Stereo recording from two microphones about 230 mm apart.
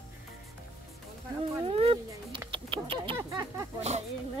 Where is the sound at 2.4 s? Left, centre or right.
Right.